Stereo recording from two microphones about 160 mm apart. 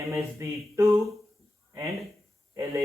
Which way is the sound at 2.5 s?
15° right (ahead or behind).